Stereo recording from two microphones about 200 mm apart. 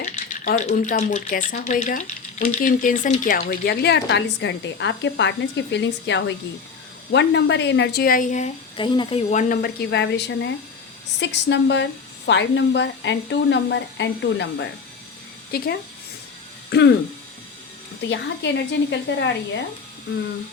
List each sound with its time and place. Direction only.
0.0 s a woman's voice: 40° left (ahead or behind)
8.8 s speech: 25° left (ahead or behind)
9.3 s a woman's voice: 40° left (ahead or behind); by 14.7 s 60° left (ahead or behind)
15.5 s speech: 50° left (ahead or behind)
18.1 s a woman's voice: 60° left (ahead or behind)